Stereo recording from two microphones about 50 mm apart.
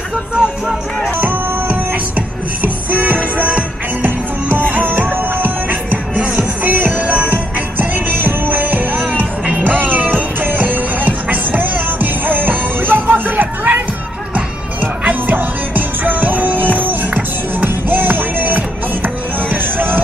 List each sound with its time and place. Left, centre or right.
0.4 s music: centre
1.2 s music: right